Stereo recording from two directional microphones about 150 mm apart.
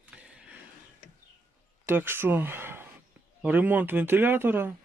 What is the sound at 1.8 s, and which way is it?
Speech, 15° right (ahead or behind).